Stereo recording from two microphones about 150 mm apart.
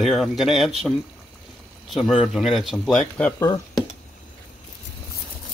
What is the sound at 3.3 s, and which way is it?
Speech, 25° left (ahead or behind).